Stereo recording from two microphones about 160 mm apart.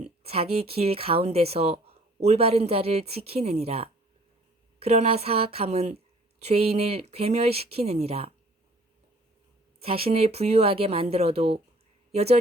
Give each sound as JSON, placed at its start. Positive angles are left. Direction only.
{"t": 0.2, "sound": "speech", "side_deg": -40}
{"t": 9.8, "sound": "speech", "side_deg": -35}